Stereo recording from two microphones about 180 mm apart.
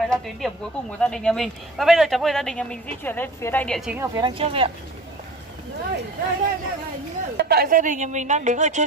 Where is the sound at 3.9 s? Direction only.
15° right (ahead or behind).